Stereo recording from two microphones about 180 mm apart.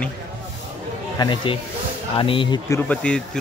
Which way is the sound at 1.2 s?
25° left (ahead or behind).